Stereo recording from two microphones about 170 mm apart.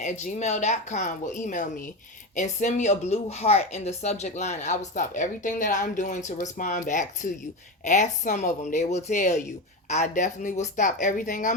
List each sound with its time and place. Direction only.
0.0 s speech: 45° left (ahead or behind)